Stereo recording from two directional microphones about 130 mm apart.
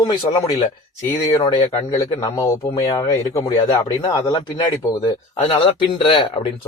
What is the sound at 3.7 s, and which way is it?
Speech, 40° left (ahead or behind).